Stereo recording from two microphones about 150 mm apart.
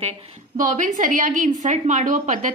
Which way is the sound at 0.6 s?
60° right (ahead or behind).